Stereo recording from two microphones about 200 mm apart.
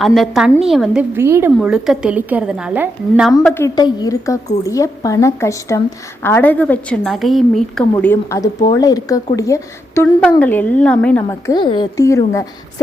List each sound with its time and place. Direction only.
0.0 s a woman's voice: centre (ahead or behind)
3.4 s a woman's voice: 10° left (ahead or behind)
7.9 s speech: 10° left (ahead or behind)